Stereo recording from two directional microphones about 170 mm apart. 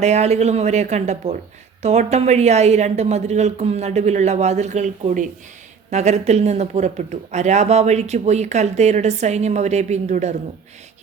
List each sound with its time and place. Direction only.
0.0 s speech: 40° right (ahead or behind)